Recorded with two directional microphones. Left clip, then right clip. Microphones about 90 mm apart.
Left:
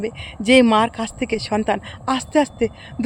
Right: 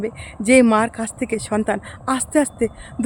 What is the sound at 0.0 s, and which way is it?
Speech, 35° right (ahead or behind).